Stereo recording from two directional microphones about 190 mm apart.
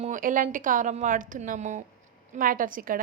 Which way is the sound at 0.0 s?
45° right (ahead or behind).